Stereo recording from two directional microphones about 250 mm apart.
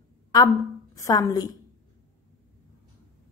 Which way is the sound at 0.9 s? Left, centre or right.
Centre.